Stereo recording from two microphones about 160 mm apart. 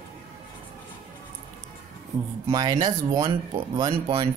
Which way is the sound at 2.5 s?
25° right (ahead or behind).